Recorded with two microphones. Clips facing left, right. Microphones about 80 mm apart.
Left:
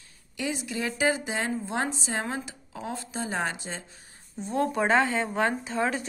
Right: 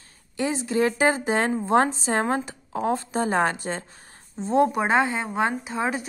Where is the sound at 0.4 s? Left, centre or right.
Right.